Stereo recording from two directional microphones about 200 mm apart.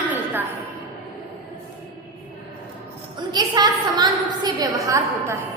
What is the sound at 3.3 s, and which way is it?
A woman's voice, 20° right (ahead or behind).